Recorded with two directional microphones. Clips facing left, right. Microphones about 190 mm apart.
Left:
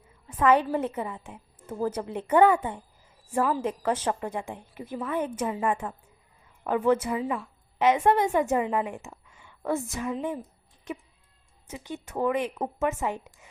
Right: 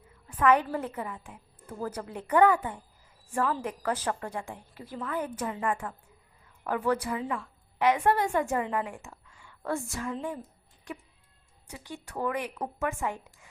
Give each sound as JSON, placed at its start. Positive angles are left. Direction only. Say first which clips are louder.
{"t": 0.3, "sound": "a woman's voice", "louder": "left 2 dB", "side_deg": 25}